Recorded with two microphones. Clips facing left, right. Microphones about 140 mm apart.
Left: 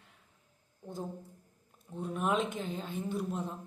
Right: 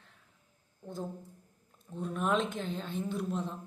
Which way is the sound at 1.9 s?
10° left (ahead or behind).